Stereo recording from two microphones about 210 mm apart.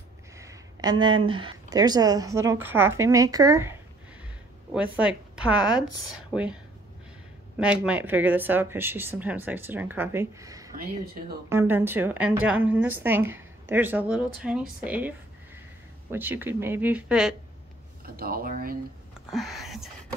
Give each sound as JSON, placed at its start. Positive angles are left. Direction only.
{"t": 0.4, "sound": "a woman's voice", "side_deg": -15}
{"t": 4.7, "sound": "a woman's voice", "side_deg": -5}
{"t": 18.0, "sound": "speech", "side_deg": -45}
{"t": 19.3, "sound": "a woman's voice", "side_deg": 0}